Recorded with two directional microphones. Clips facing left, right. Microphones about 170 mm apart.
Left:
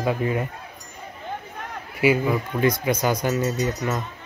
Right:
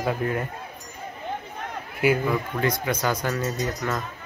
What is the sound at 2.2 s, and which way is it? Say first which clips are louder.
Speech: left 3 dB; 15° left (ahead or behind).